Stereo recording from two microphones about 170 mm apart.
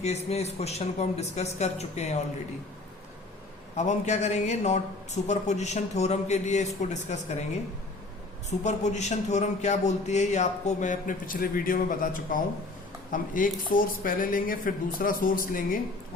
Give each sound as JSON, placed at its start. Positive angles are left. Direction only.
{"t": 0.0, "sound": "speech", "side_deg": 40}
{"t": 3.8, "sound": "speech", "side_deg": 45}
{"t": 8.4, "sound": "speech", "side_deg": 45}